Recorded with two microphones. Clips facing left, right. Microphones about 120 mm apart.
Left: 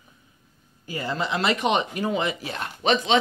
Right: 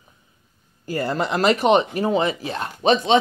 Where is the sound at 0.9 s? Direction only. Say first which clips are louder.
Right 5 dB; 50° right (ahead or behind); by 3.0 s 30° right (ahead or behind).